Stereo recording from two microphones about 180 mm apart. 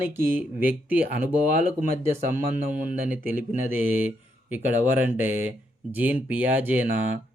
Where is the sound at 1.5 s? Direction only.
50° right (ahead or behind).